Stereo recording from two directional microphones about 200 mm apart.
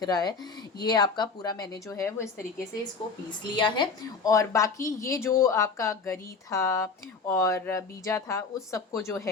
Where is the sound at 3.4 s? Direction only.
25° left (ahead or behind).